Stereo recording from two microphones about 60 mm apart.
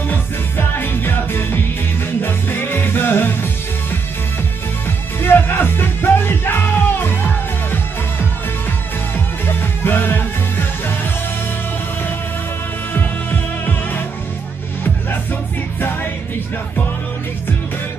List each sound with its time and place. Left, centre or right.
0.1 s music: left
5.2 s music: left
12.9 s music: left